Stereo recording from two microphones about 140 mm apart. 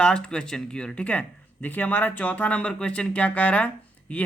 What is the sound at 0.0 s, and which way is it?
Speech, 5° left (ahead or behind).